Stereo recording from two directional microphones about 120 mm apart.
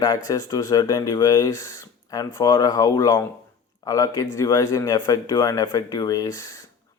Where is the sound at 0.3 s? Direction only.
30° left (ahead or behind).